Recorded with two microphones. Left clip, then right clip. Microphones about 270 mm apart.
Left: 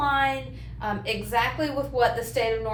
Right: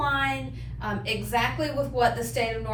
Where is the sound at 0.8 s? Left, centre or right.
Left.